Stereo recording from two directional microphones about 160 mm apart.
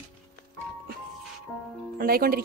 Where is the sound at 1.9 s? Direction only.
65° right (ahead or behind).